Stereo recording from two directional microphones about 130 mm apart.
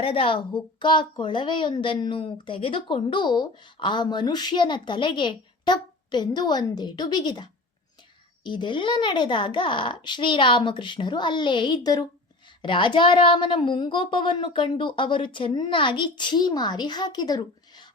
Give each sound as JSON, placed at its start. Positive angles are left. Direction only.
{"t": 0.0, "sound": "a woman's voice", "side_deg": 45}